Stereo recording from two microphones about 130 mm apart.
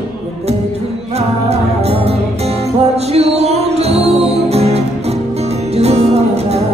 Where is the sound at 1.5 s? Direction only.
55° right (ahead or behind).